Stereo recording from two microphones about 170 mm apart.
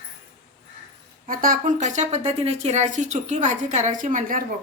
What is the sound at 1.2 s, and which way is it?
A woman's voice, 55° right (ahead or behind).